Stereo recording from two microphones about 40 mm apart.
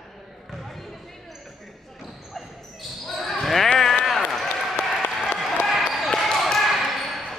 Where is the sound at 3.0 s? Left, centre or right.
Centre.